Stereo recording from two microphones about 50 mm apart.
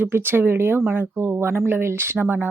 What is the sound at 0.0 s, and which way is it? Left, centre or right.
Speech, right.